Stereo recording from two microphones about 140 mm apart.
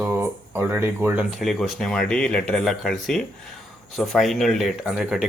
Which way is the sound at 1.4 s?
Centre (ahead or behind).